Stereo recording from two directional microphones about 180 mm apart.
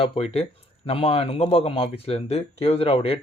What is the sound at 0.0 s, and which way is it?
Speech, 35° left (ahead or behind).